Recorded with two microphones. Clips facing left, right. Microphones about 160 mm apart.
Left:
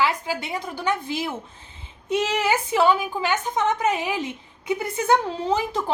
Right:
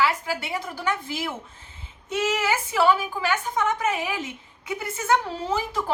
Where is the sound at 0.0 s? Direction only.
20° left (ahead or behind).